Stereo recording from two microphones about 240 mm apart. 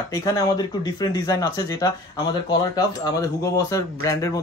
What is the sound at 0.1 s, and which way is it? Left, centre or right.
Speech, centre.